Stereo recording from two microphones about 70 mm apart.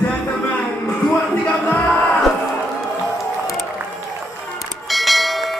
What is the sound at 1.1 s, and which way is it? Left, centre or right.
Music, centre.